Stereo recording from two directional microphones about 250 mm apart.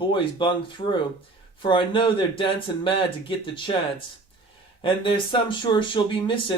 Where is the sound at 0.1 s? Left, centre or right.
Centre.